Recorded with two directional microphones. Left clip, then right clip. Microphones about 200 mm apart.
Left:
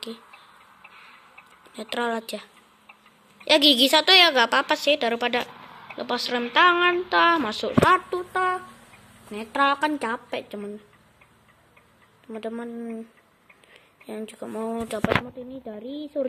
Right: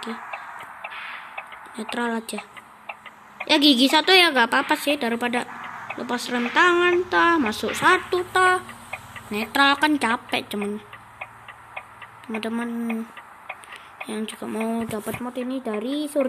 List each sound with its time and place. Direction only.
0.3 s chicken: 45° right (ahead or behind)
1.8 s speech: centre (ahead or behind)
3.4 s speech: centre (ahead or behind)
12.3 s speech: 5° right (ahead or behind)
14.0 s speech: centre (ahead or behind)